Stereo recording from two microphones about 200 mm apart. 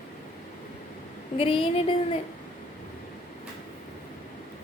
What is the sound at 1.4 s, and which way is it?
Speech, 30° left (ahead or behind).